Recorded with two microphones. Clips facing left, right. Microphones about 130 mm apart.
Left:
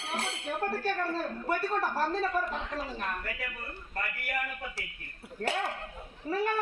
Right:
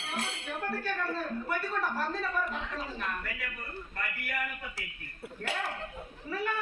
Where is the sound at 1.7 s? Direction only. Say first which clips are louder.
Left 3 dB; 40° left (ahead or behind).